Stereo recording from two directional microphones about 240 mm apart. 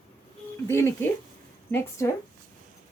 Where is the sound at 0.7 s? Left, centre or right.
Centre.